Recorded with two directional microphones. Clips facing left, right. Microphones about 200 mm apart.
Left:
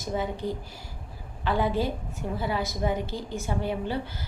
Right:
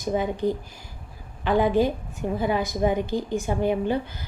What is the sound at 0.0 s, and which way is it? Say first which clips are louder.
A woman's voice: right 6 dB; 15° right (ahead or behind).